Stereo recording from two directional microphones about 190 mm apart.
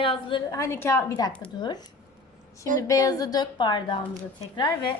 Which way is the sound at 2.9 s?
20° left (ahead or behind).